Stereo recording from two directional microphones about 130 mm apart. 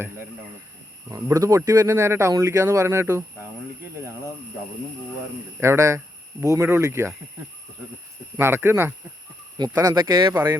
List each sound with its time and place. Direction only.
1.1 s speech: 25° right (ahead or behind)
5.5 s speech: 20° right (ahead or behind)
8.4 s speech: 20° right (ahead or behind)
9.8 s speech: 35° right (ahead or behind)